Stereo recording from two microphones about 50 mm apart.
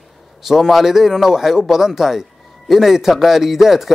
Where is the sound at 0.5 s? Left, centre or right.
Centre.